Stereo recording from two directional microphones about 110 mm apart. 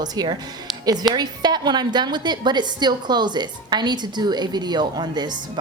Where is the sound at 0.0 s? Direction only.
40° right (ahead or behind).